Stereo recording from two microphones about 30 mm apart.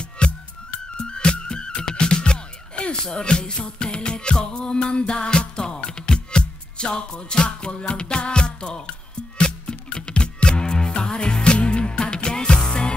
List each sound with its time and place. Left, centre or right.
0.0 s music: left